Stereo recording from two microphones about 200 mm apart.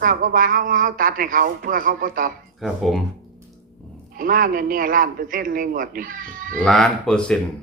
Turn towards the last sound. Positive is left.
turn(degrees=5)  # may be behind; listen again after turning